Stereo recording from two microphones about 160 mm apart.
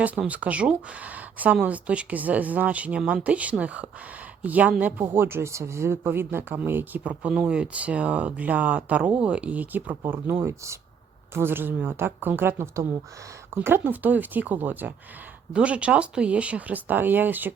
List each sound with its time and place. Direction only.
0.0 s speech: 10° right (ahead or behind)